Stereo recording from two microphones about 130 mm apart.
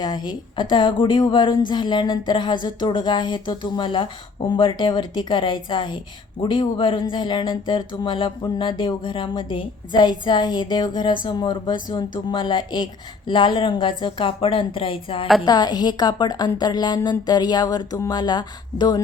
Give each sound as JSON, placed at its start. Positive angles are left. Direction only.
{"t": 0.0, "sound": "speech", "side_deg": 35}